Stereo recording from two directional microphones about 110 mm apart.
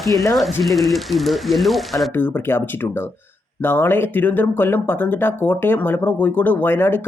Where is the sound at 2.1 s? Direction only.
20° left (ahead or behind).